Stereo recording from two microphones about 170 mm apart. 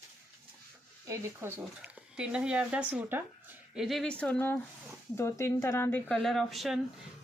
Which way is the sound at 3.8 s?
Centre (ahead or behind).